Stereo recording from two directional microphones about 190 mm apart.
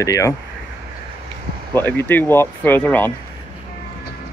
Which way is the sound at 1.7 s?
10° left (ahead or behind).